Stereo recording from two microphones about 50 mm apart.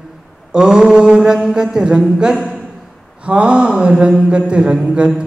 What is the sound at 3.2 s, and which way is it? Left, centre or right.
Mantra, right.